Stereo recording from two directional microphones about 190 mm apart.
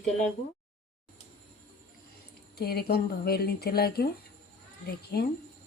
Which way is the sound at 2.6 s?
55° left (ahead or behind).